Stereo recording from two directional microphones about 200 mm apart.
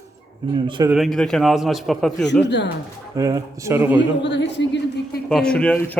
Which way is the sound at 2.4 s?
60° left (ahead or behind).